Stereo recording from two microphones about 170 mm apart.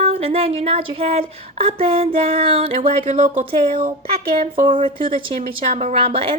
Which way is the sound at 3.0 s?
45° right (ahead or behind).